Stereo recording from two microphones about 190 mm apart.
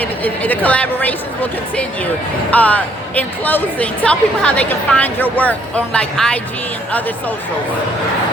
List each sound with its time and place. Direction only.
0.0 s a woman's voice: 10° left (ahead or behind)